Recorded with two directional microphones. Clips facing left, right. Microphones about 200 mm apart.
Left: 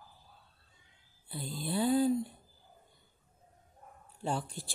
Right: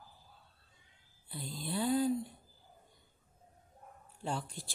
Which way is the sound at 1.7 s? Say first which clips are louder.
Left 3 dB; 30° left (ahead or behind).